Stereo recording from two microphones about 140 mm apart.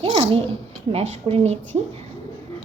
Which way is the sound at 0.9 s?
45° right (ahead or behind).